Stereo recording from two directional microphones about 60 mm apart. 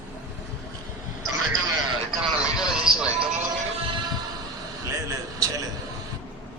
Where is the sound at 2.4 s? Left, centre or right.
Centre.